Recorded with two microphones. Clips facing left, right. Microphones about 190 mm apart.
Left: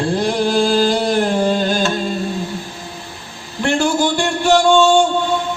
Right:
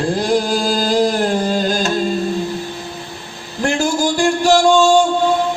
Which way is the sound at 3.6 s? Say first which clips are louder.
Left 1 dB; 40° right (ahead or behind).